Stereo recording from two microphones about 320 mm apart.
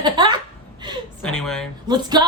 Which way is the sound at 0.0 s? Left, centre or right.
Centre.